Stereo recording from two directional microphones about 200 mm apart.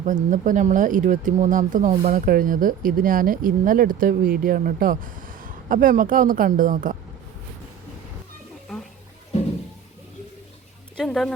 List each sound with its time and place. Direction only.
0.0 s speech: 40° right (ahead or behind)
10.9 s speech: centre (ahead or behind)